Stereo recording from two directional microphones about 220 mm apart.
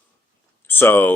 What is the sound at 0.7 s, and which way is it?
Speech, 10° left (ahead or behind).